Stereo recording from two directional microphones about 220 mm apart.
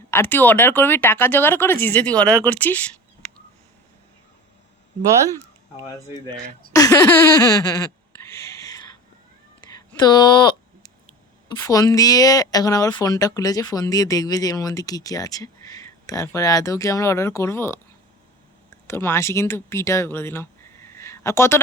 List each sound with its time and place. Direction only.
0.1 s a woman's voice: 10° left (ahead or behind)
6.7 s a sound: 15° left (ahead or behind)
11.4 s a woman's voice: 15° left (ahead or behind)
18.9 s speech: 10° left (ahead or behind)